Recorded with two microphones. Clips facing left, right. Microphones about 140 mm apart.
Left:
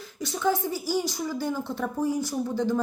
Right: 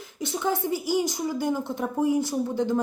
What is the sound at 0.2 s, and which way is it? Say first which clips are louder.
Speech: left 1 dB; 20° right (ahead or behind).